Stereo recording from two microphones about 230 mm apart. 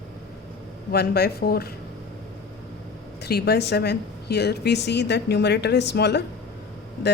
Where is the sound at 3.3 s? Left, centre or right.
Left.